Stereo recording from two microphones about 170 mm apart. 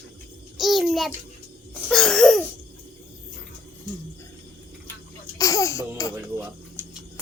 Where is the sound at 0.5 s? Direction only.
Centre (ahead or behind).